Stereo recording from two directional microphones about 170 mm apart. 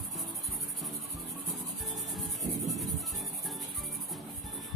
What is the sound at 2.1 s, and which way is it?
Music, centre (ahead or behind).